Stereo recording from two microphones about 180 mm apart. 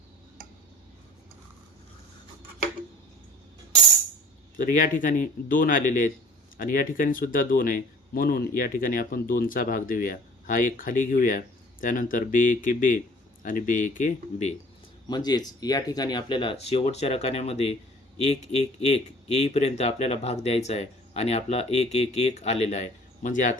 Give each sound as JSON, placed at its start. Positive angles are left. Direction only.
{"t": 4.5, "sound": "speech", "side_deg": 45}
{"t": 15.0, "sound": "speech", "side_deg": 25}